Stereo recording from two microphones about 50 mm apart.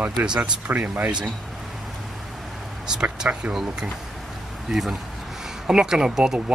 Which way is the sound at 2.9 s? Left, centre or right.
Centre.